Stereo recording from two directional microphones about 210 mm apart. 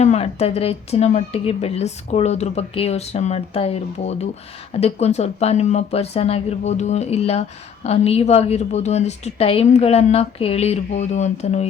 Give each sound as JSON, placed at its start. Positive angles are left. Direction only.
{"t": 0.0, "sound": "a woman's voice", "side_deg": 30}